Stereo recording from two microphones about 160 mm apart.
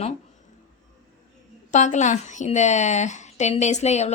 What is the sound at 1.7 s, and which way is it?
A woman's voice, 50° left (ahead or behind).